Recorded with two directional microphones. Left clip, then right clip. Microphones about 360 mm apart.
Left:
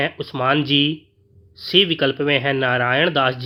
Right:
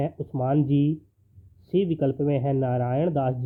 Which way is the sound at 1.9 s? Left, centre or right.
Centre.